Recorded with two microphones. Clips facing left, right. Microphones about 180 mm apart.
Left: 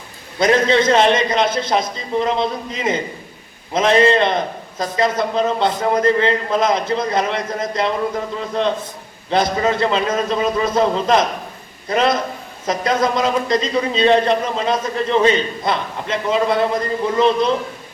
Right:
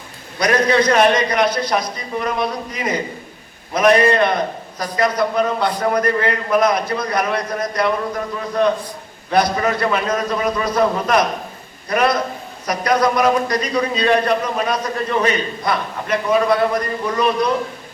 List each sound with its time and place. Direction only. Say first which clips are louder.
0.3 s a man's voice: left 1 dB; 25° left (ahead or behind)